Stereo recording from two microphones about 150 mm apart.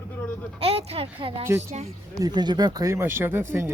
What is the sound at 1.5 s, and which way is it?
Speech, 15° right (ahead or behind).